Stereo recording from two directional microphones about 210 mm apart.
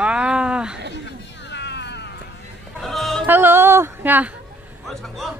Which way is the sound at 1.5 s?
55° left (ahead or behind).